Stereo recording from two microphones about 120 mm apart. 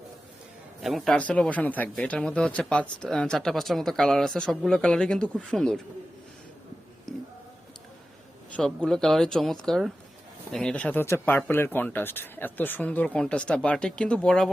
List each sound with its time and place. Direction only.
0.8 s speech: centre (ahead or behind)
7.1 s music: 5° left (ahead or behind)
8.5 s speech: 5° left (ahead or behind)